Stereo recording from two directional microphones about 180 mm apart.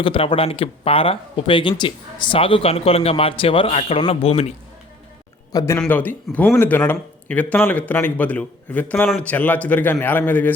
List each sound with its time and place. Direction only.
0.0 s speech: 30° left (ahead or behind)
5.5 s a man's voice: 15° left (ahead or behind)